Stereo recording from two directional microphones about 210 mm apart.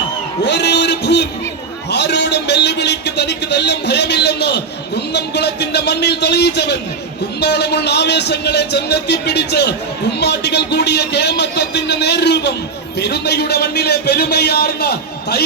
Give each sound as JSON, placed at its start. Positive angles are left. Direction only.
{"t": 0.4, "sound": "a man's voice", "side_deg": 55}